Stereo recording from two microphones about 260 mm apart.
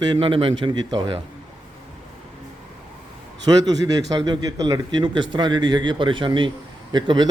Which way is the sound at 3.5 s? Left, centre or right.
Centre.